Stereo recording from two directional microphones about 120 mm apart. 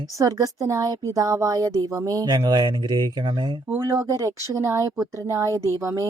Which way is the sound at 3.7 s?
20° right (ahead or behind).